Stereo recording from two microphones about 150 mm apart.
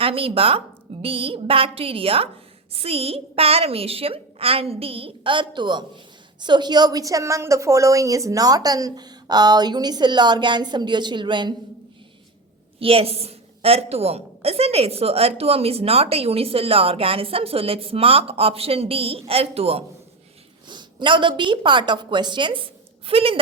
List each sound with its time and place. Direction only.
0.0 s a woman's voice: 35° right (ahead or behind)
12.8 s a woman's voice: 40° right (ahead or behind)